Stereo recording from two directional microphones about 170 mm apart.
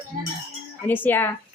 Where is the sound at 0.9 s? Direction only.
10° left (ahead or behind).